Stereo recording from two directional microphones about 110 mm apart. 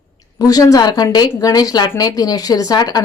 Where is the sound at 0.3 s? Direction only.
35° left (ahead or behind).